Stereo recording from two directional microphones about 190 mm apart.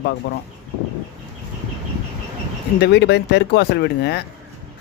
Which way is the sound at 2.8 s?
60° left (ahead or behind).